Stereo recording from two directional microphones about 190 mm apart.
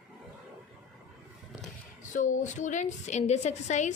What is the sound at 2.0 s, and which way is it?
A woman's voice, 40° left (ahead or behind).